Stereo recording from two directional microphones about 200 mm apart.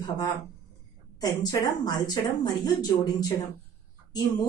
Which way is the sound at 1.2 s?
20° left (ahead or behind).